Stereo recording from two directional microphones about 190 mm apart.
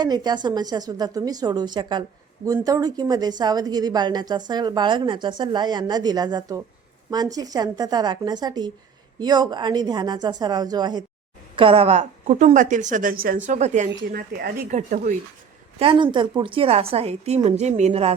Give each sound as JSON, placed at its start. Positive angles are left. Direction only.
{"t": 0.0, "sound": "a woman's voice", "side_deg": -20}
{"t": 14.1, "sound": "speech", "side_deg": -50}
{"t": 14.7, "sound": "a woman's voice", "side_deg": -40}
{"t": 15.8, "sound": "a woman's voice", "side_deg": -25}